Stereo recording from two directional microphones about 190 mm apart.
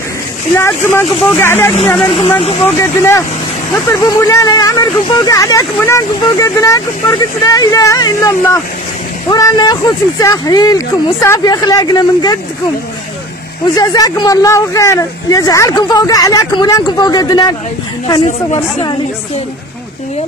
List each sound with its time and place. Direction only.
0.6 s speech: 15° left (ahead or behind)
2.0 s speech: 25° left (ahead or behind)
2.6 s speech: 15° left (ahead or behind)
13.7 s speech: 20° left (ahead or behind)